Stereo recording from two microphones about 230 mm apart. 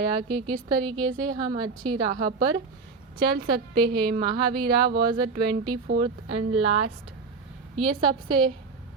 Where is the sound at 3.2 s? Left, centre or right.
Centre.